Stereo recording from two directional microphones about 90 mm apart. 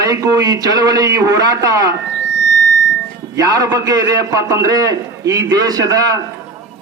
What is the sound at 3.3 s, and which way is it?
A man's voice, 45° right (ahead or behind).